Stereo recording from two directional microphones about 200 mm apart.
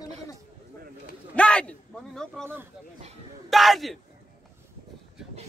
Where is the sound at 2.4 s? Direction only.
10° right (ahead or behind).